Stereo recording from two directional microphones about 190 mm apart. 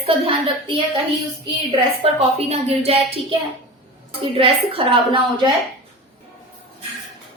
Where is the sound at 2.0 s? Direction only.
30° right (ahead or behind).